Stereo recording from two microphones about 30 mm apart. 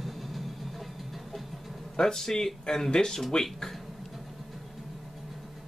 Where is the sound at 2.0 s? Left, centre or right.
Centre.